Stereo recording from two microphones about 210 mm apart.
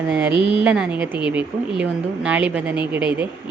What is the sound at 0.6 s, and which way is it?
Speech, 5° right (ahead or behind).